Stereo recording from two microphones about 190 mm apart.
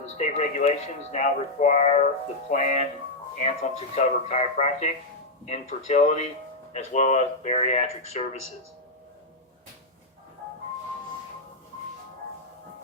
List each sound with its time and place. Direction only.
0.0 s speech: 35° left (ahead or behind)